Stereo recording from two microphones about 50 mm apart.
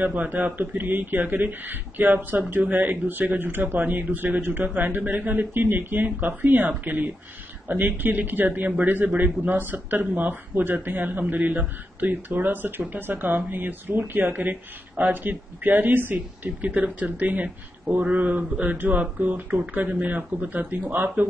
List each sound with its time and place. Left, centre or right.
0.0 s a man's voice: right